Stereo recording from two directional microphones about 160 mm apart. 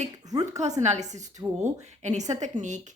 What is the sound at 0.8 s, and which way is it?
Speech, 45° right (ahead or behind).